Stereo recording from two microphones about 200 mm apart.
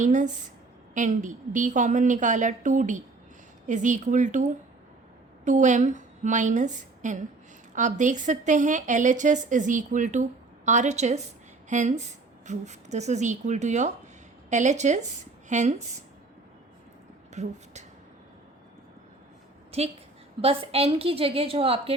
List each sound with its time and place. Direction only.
0.0 s a woman's voice: 40° right (ahead or behind)
5.5 s a woman's voice: 35° right (ahead or behind)
17.4 s a woman's voice: 35° right (ahead or behind)
19.7 s a woman's voice: 30° right (ahead or behind)